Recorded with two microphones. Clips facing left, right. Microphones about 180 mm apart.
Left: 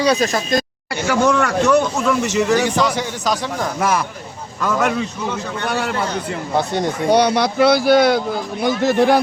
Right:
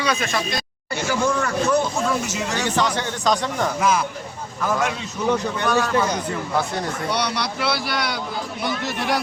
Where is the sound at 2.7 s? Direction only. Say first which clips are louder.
Left 3 dB; 10° left (ahead or behind).